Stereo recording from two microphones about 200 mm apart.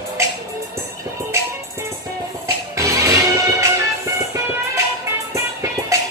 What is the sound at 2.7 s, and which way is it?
Music, 15° right (ahead or behind).